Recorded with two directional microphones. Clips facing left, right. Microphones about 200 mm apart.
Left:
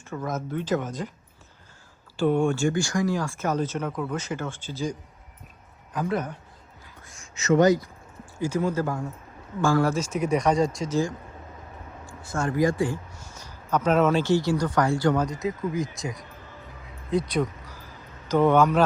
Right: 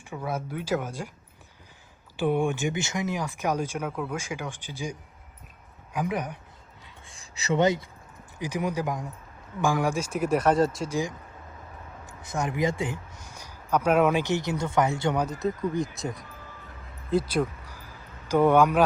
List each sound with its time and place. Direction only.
0.0 s speech: 10° right (ahead or behind)
2.1 s speech: 15° right (ahead or behind)
8.4 s speech: 15° right (ahead or behind)
15.3 s speech: centre (ahead or behind)
17.7 s crow: 10° right (ahead or behind)